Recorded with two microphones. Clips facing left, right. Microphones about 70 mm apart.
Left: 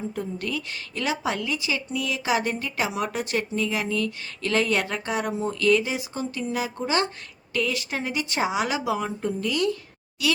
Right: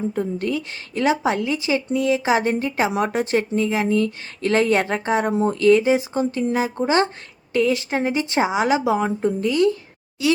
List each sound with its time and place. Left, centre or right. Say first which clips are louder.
0.1 s a woman's voice: right 7 dB; right
5.3 s speech: right 7 dB; right
5.5 s a woman's voice: right 7 dB; right